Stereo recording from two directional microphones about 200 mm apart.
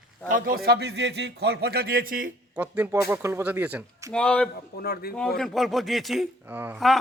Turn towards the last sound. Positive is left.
turn(degrees=-10)  # may be behind; listen again after turning